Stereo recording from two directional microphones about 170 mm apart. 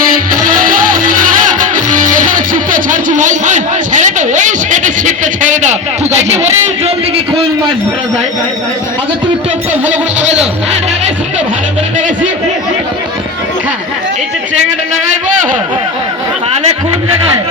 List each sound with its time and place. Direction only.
0.4 s music: 55° right (ahead or behind)
2.5 s a sound: 50° right (ahead or behind)
10.2 s a man's voice: 40° right (ahead or behind)